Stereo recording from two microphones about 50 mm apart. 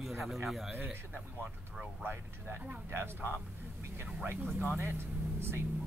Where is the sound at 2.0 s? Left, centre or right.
Right.